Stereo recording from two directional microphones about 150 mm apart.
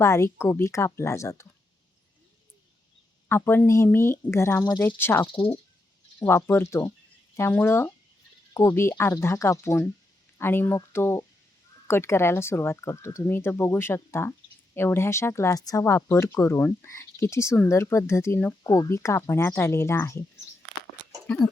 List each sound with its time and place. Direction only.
0.0 s speech: 15° left (ahead or behind)
3.2 s speech: 15° left (ahead or behind)
5.2 s speech: 35° left (ahead or behind)
6.2 s speech: 15° left (ahead or behind)